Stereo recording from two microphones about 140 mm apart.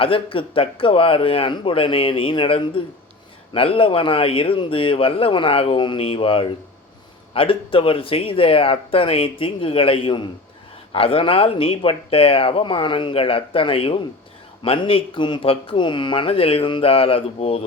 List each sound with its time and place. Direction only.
0.0 s speech: 40° left (ahead or behind)